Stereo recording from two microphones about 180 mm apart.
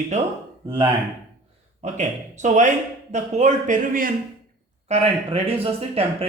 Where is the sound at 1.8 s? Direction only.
40° right (ahead or behind).